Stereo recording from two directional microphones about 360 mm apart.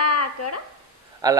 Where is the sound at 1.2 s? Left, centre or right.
Centre.